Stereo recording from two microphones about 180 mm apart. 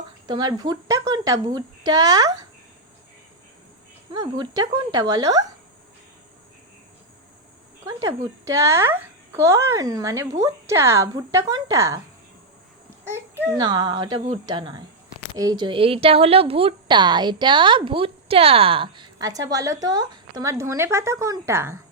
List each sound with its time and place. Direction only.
0.3 s speech: 25° right (ahead or behind)
4.1 s speech: 20° right (ahead or behind)
7.9 s a child's voice: 20° right (ahead or behind)
13.1 s a sound: 15° right (ahead or behind)
13.6 s speech: 25° right (ahead or behind)